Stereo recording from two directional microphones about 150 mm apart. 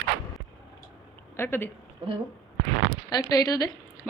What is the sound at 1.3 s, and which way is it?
Speech, 15° left (ahead or behind).